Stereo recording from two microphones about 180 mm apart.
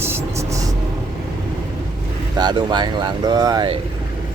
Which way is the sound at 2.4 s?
25° right (ahead or behind).